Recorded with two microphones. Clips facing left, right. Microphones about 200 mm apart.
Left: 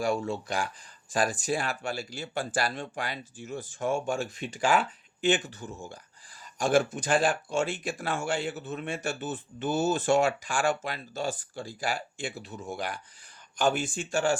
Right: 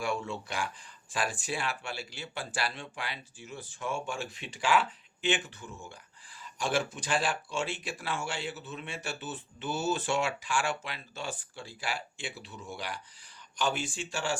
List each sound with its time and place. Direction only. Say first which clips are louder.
0.0 s speech: left 5 dB; 40° left (ahead or behind)